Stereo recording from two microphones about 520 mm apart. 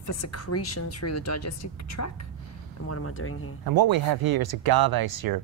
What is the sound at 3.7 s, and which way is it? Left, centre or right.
Speech, right.